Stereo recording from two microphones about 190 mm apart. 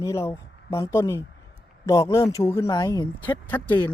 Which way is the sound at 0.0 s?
15° left (ahead or behind).